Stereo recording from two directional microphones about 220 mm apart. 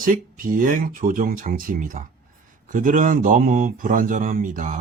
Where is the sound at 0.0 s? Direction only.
35° right (ahead or behind).